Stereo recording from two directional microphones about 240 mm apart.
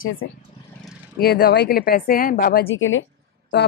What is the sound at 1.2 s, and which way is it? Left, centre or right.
Speech, left.